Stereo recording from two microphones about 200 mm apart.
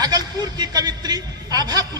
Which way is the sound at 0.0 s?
20° right (ahead or behind).